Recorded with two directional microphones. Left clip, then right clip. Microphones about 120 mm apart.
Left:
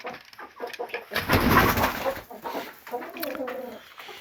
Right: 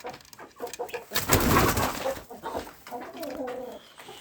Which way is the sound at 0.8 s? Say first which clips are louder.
Left 1 dB; 5° right (ahead or behind).